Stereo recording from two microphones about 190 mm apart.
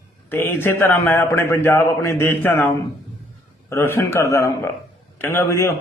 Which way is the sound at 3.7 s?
15° left (ahead or behind).